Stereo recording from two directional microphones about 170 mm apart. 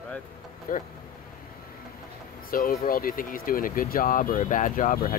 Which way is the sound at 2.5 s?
55° left (ahead or behind).